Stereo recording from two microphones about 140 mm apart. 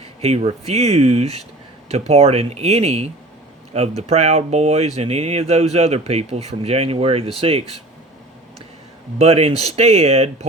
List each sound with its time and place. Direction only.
0.0 s speech: 45° right (ahead or behind)
9.1 s speech: 45° right (ahead or behind)